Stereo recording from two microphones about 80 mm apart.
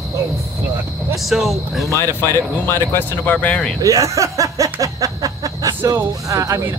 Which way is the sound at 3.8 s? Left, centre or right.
Right.